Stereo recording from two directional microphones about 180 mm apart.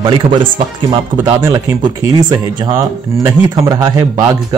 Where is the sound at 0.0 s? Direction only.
25° right (ahead or behind).